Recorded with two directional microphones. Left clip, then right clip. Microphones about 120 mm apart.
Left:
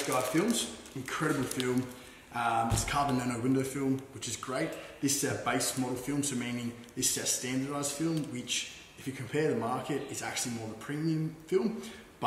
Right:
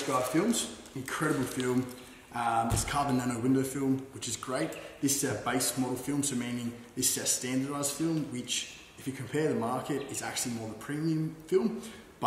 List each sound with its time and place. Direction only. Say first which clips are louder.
0.1 s a man's voice: right 1 dB; 10° right (ahead or behind)
1.6 s speech: even; 25° left (ahead or behind)
2.3 s a man's voice: even; 15° right (ahead or behind)